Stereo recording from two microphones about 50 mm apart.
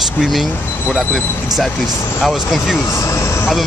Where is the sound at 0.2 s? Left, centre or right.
Centre.